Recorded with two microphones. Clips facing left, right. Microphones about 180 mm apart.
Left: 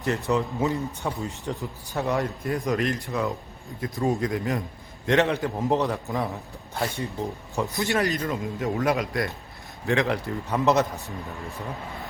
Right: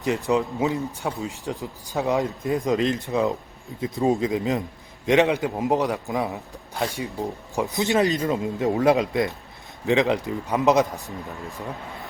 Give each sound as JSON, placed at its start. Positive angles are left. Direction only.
{"t": 0.0, "sound": "a man's voice", "side_deg": -15}